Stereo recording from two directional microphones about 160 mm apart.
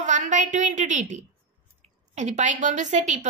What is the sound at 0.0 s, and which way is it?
A woman's voice, 50° right (ahead or behind).